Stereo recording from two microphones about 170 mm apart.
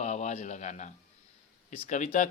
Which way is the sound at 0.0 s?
45° left (ahead or behind).